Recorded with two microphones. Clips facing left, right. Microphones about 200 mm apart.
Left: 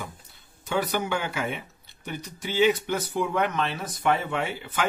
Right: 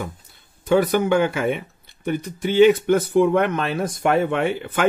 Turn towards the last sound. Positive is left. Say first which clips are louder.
# right 7 dB
turn(degrees=-55)  # may be behind; listen again after turning